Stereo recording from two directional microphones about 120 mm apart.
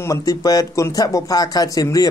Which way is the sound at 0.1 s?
30° left (ahead or behind).